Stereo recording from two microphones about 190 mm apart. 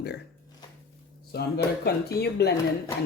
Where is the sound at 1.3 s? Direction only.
55° left (ahead or behind).